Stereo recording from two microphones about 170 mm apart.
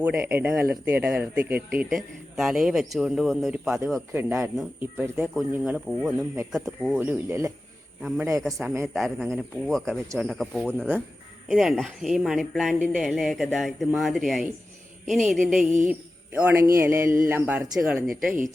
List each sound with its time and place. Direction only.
0.0 s speech: 10° right (ahead or behind)
1.8 s speech: centre (ahead or behind)
4.1 s speech: 15° right (ahead or behind)
8.0 s speech: centre (ahead or behind)